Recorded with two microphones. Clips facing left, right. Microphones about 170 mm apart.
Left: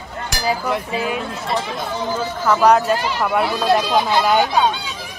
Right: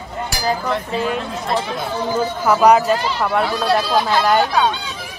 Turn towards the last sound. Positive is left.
turn(degrees=10)  # may be behind; listen again after turning